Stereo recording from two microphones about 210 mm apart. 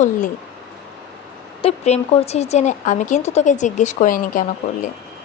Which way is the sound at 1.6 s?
30° left (ahead or behind).